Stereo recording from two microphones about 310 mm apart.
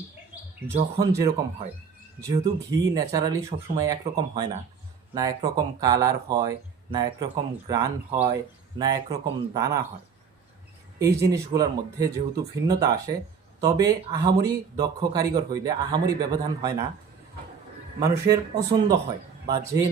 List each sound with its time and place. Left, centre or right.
0.7 s speech: centre
11.0 s speech: centre
18.3 s speech: centre